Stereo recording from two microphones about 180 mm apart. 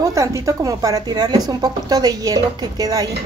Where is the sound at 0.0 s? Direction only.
15° right (ahead or behind).